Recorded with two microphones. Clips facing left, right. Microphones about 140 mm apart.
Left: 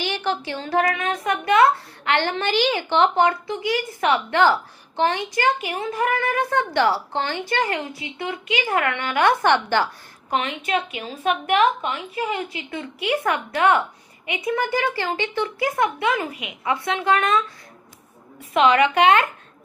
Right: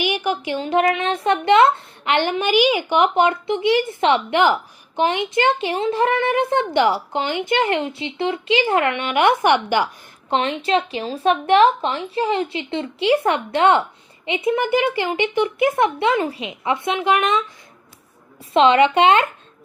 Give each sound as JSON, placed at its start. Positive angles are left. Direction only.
{"t": 0.0, "sound": "a woman's voice", "side_deg": -15}
{"t": 10.2, "sound": "a woman's voice", "side_deg": -30}
{"t": 18.5, "sound": "a woman's voice", "side_deg": -25}